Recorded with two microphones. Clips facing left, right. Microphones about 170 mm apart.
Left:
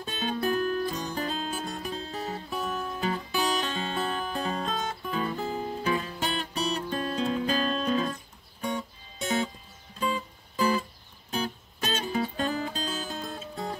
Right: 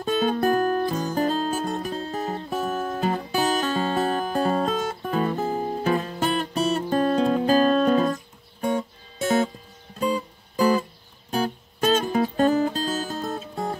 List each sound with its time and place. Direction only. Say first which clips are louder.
0.0 s music: right 8 dB; 40° right (ahead or behind)